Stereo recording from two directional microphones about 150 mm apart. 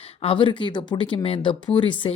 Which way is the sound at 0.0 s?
40° left (ahead or behind).